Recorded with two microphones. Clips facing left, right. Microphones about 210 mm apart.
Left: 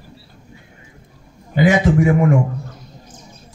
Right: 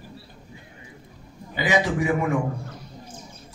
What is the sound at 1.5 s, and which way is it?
Speech, 50° left (ahead or behind).